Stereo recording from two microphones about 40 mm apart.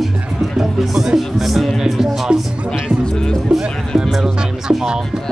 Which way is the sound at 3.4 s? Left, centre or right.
Centre.